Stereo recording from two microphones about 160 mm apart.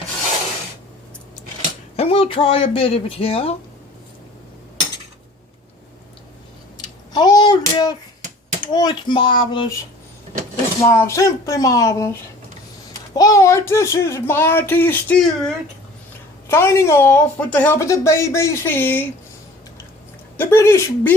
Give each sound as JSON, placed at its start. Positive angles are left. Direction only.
{"t": 2.0, "sound": "speech", "side_deg": 35}
{"t": 7.1, "sound": "a sound", "side_deg": 25}
{"t": 8.6, "sound": "speech", "side_deg": 25}
{"t": 10.8, "sound": "speech", "side_deg": 15}
{"t": 13.1, "sound": "speech", "side_deg": 20}
{"t": 16.5, "sound": "speech", "side_deg": 15}
{"t": 20.3, "sound": "speech", "side_deg": 15}